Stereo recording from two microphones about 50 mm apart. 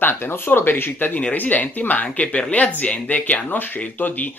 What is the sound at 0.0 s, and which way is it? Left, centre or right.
Speech, left.